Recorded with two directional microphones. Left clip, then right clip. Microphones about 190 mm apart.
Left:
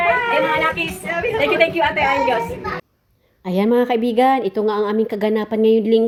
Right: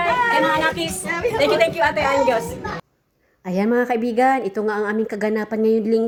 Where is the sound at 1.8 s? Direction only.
10° left (ahead or behind).